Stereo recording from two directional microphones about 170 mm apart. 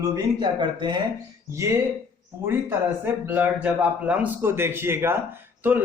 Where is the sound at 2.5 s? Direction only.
10° right (ahead or behind).